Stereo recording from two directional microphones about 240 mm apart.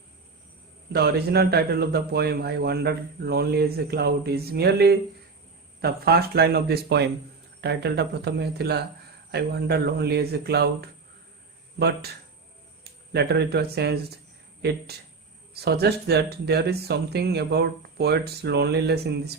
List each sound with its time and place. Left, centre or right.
0.9 s a man's voice: right
12.8 s a man's voice: right